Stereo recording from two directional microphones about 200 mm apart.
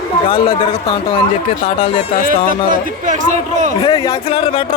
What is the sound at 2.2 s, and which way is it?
A man's voice, 40° right (ahead or behind).